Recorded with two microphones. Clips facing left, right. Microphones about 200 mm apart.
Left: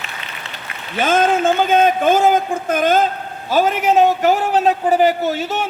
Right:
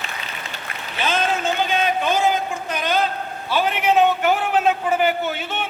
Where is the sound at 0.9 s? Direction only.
50° left (ahead or behind).